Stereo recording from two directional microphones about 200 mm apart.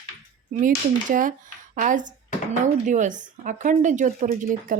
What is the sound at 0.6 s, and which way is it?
A woman's voice, 40° right (ahead or behind).